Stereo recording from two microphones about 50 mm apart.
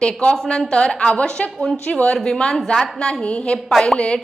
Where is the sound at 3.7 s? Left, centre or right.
Centre.